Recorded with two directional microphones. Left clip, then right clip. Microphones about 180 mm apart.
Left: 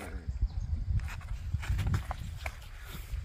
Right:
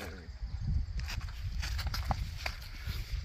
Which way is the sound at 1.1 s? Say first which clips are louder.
Right 2 dB; 30° right (ahead or behind).